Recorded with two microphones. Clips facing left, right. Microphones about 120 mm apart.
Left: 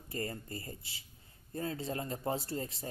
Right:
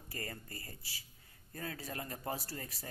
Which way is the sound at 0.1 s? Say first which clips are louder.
Left 7 dB; 25° left (ahead or behind).